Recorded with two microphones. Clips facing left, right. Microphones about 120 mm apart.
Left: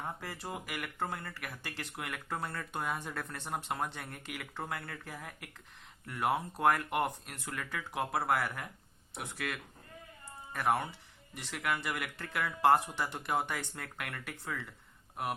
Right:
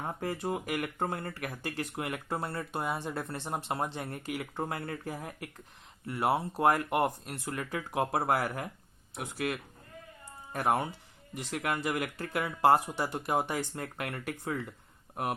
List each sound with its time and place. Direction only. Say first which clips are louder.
0.2 s speech: right 8 dB; 45° right (ahead or behind)